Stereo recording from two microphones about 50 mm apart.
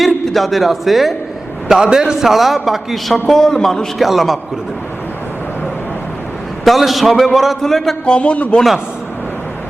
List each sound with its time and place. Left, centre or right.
0.3 s a man's voice: centre
1.6 s a man's voice: centre
6.7 s a man's voice: centre
8.0 s a man's voice: left